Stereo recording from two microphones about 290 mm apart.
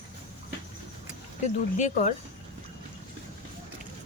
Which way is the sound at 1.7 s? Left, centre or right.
Left.